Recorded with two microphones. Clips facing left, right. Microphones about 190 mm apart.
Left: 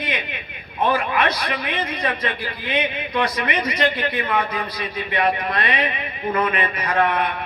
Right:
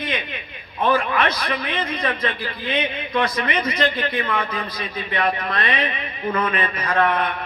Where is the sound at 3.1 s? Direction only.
15° left (ahead or behind).